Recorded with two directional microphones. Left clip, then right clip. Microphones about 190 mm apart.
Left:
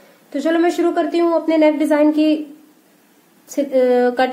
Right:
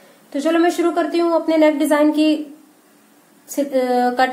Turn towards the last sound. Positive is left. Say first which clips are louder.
# left 2 dB
turn(degrees=30)  # may be behind; listen again after turning